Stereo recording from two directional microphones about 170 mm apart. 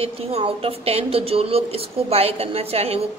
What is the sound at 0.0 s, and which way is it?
A woman's voice, 35° right (ahead or behind).